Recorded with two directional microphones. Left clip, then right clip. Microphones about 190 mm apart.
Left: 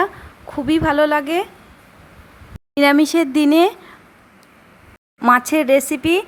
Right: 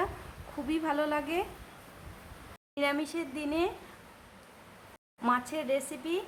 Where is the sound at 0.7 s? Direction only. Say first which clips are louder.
Left 15 dB; 35° left (ahead or behind).